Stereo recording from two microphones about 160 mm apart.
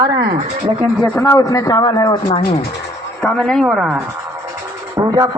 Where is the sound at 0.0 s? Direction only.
25° right (ahead or behind).